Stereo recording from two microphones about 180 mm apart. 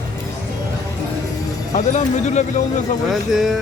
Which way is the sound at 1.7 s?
40° left (ahead or behind).